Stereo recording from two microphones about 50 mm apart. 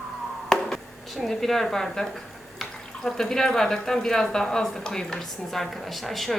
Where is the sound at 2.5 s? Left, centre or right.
Centre.